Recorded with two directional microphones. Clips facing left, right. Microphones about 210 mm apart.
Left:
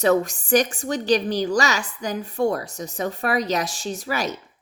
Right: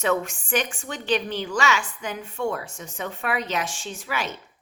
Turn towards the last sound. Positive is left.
turn(degrees=40)  # may be behind; listen again after turning